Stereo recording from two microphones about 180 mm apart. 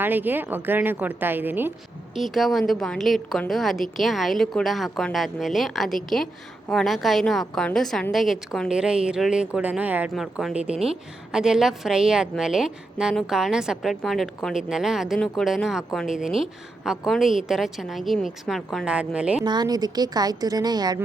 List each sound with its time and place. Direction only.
0.0 s a woman's voice: 10° right (ahead or behind)
2.1 s a woman's voice: centre (ahead or behind)
19.5 s a woman's voice: 20° right (ahead or behind)